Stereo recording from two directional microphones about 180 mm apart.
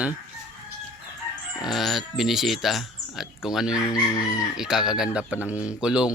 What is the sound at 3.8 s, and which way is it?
Chicken, 20° left (ahead or behind).